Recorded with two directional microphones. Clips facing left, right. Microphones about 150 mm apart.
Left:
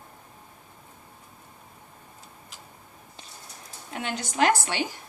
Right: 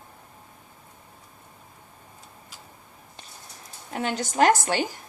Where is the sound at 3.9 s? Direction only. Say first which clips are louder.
Right 3 dB; 40° right (ahead or behind).